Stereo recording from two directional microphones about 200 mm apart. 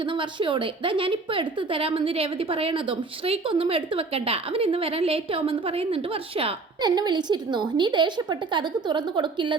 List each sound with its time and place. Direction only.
0.3 s a woman's voice: 25° right (ahead or behind)